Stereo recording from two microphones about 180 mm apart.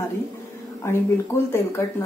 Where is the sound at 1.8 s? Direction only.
15° left (ahead or behind).